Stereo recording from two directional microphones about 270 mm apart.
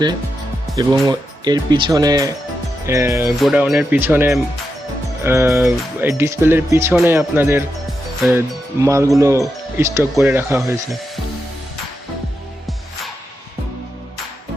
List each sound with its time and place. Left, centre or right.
0.8 s speech: centre